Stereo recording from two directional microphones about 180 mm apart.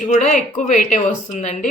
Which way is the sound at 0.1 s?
45° left (ahead or behind).